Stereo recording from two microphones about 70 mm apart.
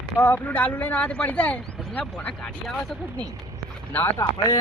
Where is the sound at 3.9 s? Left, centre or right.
Left.